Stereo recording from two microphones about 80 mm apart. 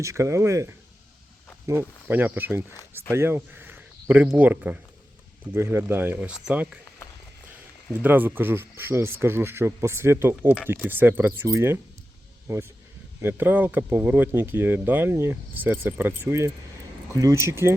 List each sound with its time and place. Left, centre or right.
0.0 s speech: right
5.5 s speech: right
6.2 s speech: centre
7.9 s speech: right
12.5 s speech: right
13.2 s speech: right
16.2 s speech: right